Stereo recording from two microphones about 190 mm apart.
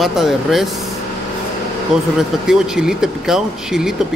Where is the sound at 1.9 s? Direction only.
Centre (ahead or behind).